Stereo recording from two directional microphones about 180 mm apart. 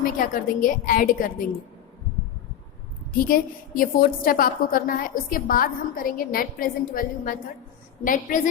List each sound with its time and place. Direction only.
0.0 s a woman's voice: 50° left (ahead or behind)
3.1 s a woman's voice: 50° left (ahead or behind)